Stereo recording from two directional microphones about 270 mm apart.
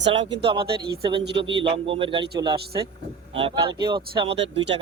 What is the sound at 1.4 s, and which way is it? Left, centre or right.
Speech, centre.